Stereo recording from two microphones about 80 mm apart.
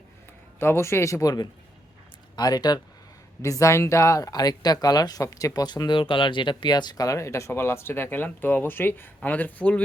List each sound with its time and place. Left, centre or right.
0.6 s speech: left
3.4 s speech: left
5.6 s speech: left; by 9.8 s centre